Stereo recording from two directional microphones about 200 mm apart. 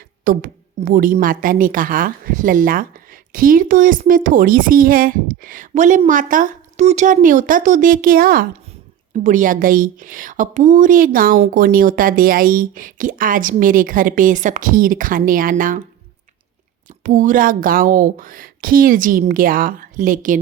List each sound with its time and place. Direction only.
0.3 s a woman's voice: 45° right (ahead or behind)
17.0 s a woman's voice: 40° right (ahead or behind)